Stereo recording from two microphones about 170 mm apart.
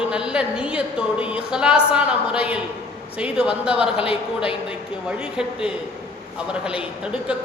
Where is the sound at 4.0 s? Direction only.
30° left (ahead or behind).